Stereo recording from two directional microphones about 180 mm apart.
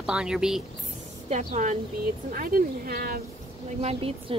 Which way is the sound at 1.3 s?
40° right (ahead or behind).